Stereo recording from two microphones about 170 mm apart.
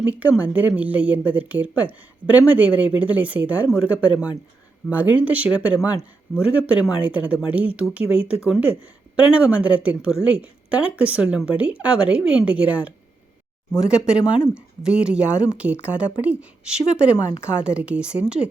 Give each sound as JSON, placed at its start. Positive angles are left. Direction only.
{"t": 0.0, "sound": "speech", "side_deg": -10}
{"t": 5.8, "sound": "a man's voice", "side_deg": 20}
{"t": 6.4, "sound": "speech", "side_deg": -10}